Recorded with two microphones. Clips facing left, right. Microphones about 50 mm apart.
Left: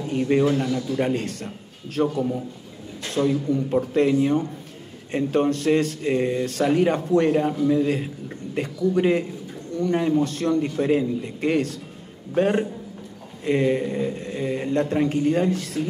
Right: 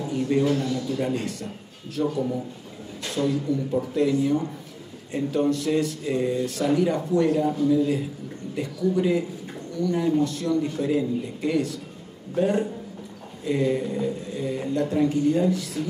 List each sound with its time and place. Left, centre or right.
0.0 s a sound: left
0.6 s a man's voice: left
0.9 s speech: left
3.1 s speech: left